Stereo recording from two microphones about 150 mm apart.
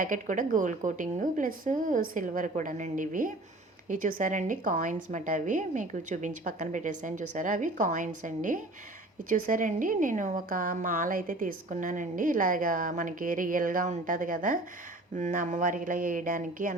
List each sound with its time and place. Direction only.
0.0 s a woman's voice: 60° right (ahead or behind)